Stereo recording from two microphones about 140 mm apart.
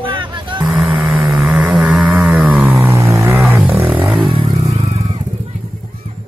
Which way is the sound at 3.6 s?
Centre (ahead or behind).